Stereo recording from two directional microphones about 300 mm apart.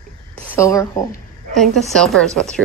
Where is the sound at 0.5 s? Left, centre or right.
Centre.